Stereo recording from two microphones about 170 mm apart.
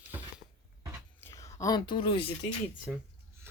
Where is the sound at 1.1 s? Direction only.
15° left (ahead or behind); by 2.3 s 35° left (ahead or behind).